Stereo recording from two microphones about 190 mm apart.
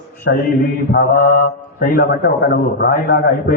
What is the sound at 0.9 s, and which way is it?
A man's voice, 50° left (ahead or behind).